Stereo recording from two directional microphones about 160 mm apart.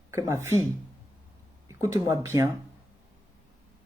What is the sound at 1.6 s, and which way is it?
Speech, 20° right (ahead or behind).